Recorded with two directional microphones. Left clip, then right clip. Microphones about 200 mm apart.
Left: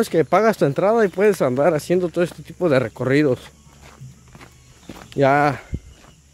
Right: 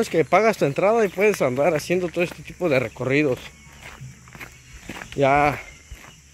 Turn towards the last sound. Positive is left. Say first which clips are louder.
# left 2 dB
turn(degrees=30)  # may be behind; listen again after turning